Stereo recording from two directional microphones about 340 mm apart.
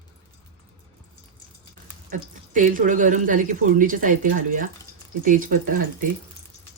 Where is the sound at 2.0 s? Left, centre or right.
Right.